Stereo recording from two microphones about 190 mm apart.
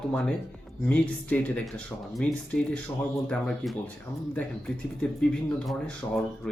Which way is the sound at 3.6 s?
Centre (ahead or behind).